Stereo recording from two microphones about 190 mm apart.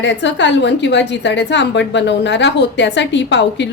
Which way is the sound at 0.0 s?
70° left (ahead or behind).